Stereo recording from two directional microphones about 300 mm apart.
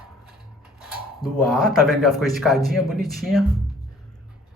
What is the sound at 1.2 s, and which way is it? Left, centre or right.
Speech, centre.